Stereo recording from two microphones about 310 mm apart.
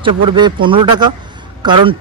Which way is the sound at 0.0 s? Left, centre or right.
Centre.